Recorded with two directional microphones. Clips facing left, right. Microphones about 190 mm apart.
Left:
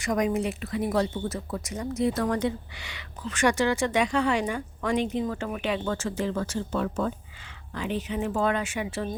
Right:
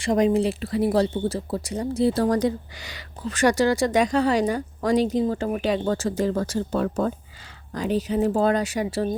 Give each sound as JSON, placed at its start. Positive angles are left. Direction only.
{"t": 0.0, "sound": "speech", "side_deg": -30}